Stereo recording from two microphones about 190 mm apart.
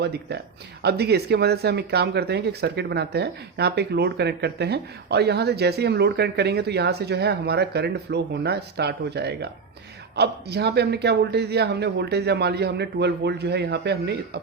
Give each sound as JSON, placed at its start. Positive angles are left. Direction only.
{"t": 0.0, "sound": "speech", "side_deg": -60}